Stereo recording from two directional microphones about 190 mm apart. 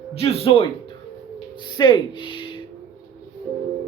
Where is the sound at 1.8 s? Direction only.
25° left (ahead or behind).